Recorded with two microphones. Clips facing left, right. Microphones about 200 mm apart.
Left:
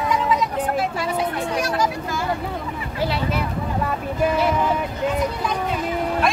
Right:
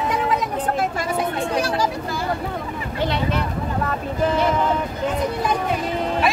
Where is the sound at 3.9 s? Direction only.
10° left (ahead or behind).